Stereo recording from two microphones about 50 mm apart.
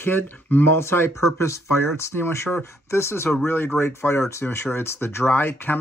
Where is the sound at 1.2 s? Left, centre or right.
Left.